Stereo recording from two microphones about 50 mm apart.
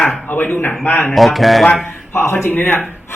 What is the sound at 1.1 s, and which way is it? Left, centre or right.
Music, centre.